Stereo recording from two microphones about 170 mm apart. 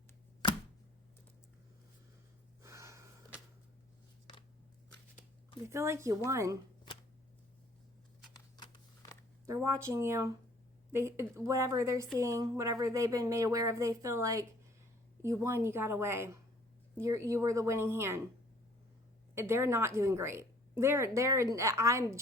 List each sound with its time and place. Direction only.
2.6 s gasp: 15° right (ahead or behind)
5.6 s a woman's voice: 15° right (ahead or behind)
8.5 s a sound: 25° left (ahead or behind)
9.8 s a woman's voice: 15° right (ahead or behind)
19.3 s a woman's voice: 15° right (ahead or behind)